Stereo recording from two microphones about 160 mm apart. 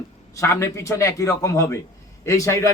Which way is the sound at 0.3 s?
15° left (ahead or behind).